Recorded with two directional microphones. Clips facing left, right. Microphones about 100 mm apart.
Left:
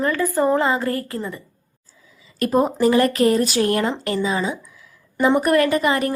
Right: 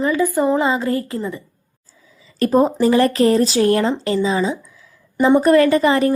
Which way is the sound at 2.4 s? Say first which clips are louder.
Right 3 dB; 30° right (ahead or behind).